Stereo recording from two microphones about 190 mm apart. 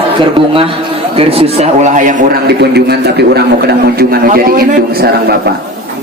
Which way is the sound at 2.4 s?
60° right (ahead or behind).